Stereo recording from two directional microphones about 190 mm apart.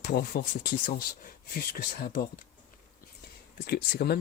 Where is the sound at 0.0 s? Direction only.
50° left (ahead or behind).